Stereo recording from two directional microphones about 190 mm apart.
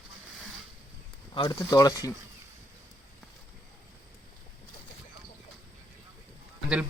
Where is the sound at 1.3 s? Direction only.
20° left (ahead or behind).